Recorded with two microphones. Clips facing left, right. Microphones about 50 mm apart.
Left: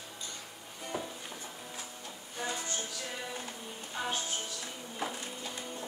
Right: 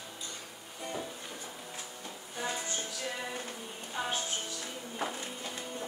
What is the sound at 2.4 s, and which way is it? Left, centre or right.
Music, centre.